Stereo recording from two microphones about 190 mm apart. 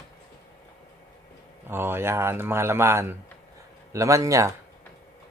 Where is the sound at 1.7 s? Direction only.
10° right (ahead or behind).